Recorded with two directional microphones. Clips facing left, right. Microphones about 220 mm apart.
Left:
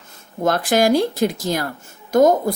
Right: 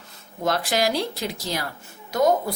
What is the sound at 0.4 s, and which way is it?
A woman's voice, 50° left (ahead or behind).